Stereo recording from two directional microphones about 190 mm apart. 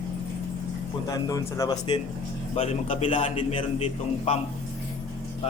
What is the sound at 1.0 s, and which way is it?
Speech, 20° left (ahead or behind).